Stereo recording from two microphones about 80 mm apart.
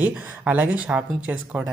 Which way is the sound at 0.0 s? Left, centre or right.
Right.